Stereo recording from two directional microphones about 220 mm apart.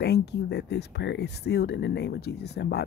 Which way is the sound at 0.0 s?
50° left (ahead or behind).